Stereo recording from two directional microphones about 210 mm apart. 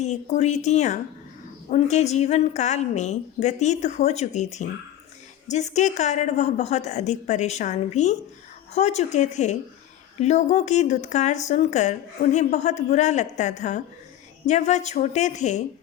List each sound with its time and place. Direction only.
0.0 s speech: 35° left (ahead or behind)